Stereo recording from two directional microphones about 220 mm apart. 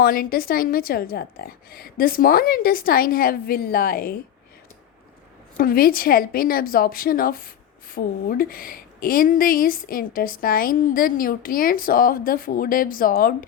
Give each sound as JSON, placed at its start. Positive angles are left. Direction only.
{"t": 0.0, "sound": "a woman's voice", "side_deg": 40}
{"t": 5.5, "sound": "a woman's voice", "side_deg": 40}